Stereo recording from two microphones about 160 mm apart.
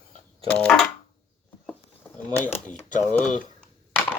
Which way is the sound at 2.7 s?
50° left (ahead or behind).